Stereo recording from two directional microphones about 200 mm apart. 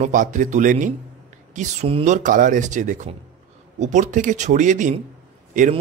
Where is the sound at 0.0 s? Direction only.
40° right (ahead or behind).